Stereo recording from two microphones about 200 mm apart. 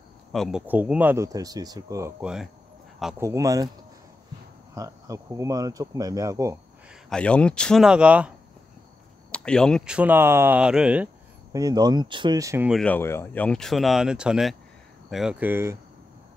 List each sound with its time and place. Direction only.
0.3 s speech: centre (ahead or behind); by 3.7 s 15° right (ahead or behind)
4.7 s speech: 15° right (ahead or behind)
6.9 s speech: 5° left (ahead or behind)
9.3 s speech: 5° left (ahead or behind)
11.5 s speech: 20° right (ahead or behind)
12.6 s speech: 5° left (ahead or behind); by 15.8 s 10° right (ahead or behind)